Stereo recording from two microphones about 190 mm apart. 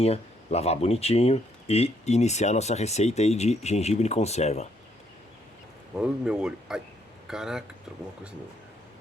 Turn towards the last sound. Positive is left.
turn(degrees=-5)  # may be behind; listen again after turning